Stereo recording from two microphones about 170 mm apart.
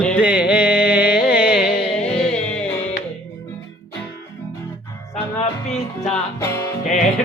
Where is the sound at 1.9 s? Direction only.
5° left (ahead or behind).